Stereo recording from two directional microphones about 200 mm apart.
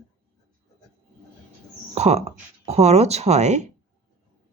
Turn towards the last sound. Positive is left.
turn(degrees=-35)  # may be behind; listen again after turning